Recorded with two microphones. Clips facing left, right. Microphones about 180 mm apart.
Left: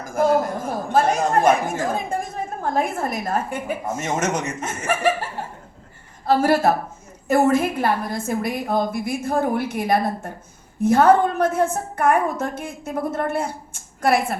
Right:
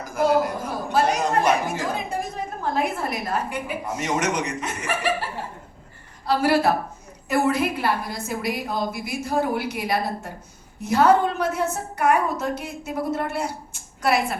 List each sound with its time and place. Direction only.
0.0 s a woman's voice: 50° left (ahead or behind)